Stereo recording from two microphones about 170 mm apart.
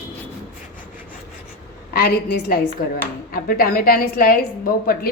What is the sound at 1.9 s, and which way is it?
A woman's voice, 65° left (ahead or behind).